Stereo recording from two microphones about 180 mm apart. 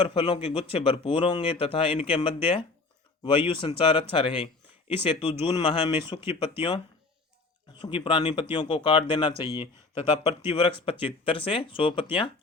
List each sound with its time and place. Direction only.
0.0 s speech: 30° left (ahead or behind)